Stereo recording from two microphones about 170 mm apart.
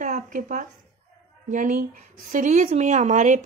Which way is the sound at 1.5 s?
50° right (ahead or behind).